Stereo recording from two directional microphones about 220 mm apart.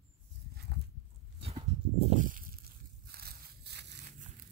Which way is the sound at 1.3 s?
25° right (ahead or behind).